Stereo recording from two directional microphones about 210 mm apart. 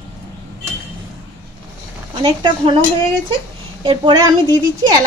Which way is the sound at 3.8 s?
20° right (ahead or behind).